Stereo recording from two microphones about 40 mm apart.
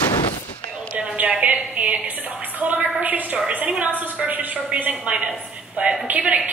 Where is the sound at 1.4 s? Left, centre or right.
Right.